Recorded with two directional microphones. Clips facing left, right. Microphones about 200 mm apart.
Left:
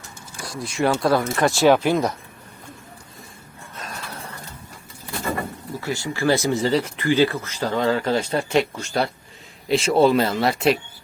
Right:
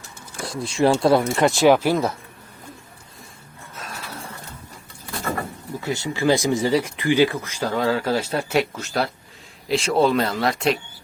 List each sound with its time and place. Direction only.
0.4 s speech: 25° right (ahead or behind); by 2.1 s 5° right (ahead or behind)
5.8 s speech: 20° right (ahead or behind); by 10.8 s 5° left (ahead or behind)